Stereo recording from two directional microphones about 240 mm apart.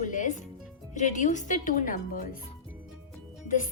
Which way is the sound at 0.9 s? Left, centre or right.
Left.